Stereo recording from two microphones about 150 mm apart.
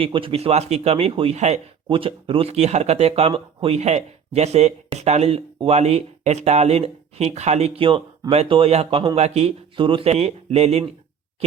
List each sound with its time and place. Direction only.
0.0 s speech: 35° right (ahead or behind)
1.9 s speech: 35° right (ahead or behind)